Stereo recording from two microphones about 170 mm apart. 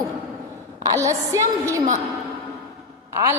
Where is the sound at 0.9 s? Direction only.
15° right (ahead or behind).